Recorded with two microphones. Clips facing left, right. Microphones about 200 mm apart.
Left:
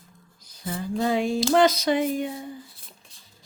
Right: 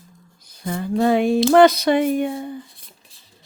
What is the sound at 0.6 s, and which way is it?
Speech, 60° right (ahead or behind).